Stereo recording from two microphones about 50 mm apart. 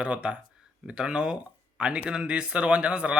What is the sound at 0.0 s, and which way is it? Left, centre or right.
Speech, right.